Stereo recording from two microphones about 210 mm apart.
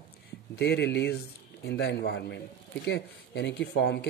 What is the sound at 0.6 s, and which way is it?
A man's voice, 55° left (ahead or behind).